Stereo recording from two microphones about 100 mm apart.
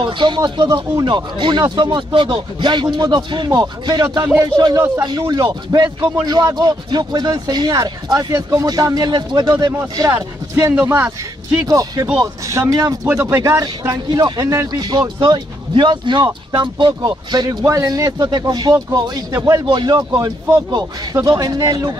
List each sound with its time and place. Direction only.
0.0 s speech: 50° right (ahead or behind)
0.4 s speech: 40° right (ahead or behind)
10.7 s a man's voice: 15° right (ahead or behind)
11.6 s speech: 35° right (ahead or behind)
19.6 s speech: 50° right (ahead or behind)